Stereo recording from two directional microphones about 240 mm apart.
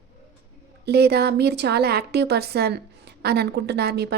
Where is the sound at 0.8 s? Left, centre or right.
Right.